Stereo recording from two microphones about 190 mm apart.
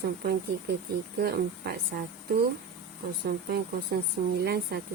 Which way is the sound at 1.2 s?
55° right (ahead or behind).